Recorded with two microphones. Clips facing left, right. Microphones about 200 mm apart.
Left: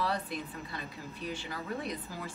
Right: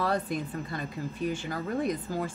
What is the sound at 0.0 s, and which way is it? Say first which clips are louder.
A woman's voice: right 5 dB; 45° right (ahead or behind).